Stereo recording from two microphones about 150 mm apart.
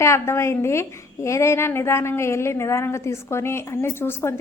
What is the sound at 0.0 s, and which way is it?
A woman's voice, 20° left (ahead or behind).